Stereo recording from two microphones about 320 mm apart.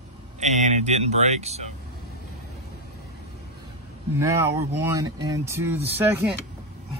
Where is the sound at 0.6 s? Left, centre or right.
Right.